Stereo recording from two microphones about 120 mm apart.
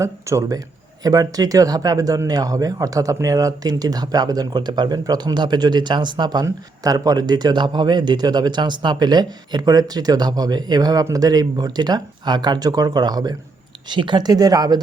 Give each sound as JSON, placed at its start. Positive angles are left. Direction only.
{"t": 0.0, "sound": "speech", "side_deg": -25}